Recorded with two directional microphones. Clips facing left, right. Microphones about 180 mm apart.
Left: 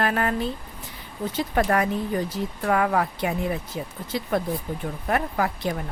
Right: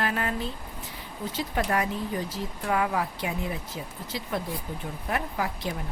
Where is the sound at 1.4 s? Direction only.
55° left (ahead or behind).